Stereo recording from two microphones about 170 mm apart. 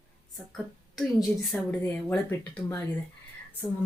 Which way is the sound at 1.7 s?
10° left (ahead or behind).